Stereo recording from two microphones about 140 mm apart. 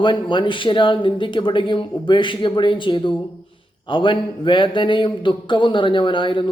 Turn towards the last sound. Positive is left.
turn(degrees=35)  # may be behind; listen again after turning